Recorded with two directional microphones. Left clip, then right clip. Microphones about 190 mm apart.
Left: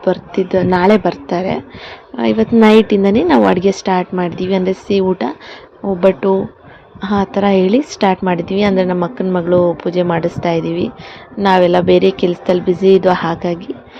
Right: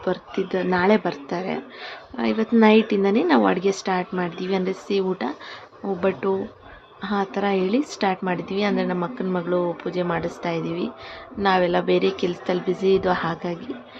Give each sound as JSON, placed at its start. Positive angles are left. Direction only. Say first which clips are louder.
{"t": 0.0, "sound": "a woman's voice", "louder": "left 10 dB", "side_deg": 20}